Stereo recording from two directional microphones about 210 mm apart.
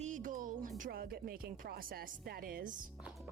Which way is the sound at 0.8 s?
45° right (ahead or behind).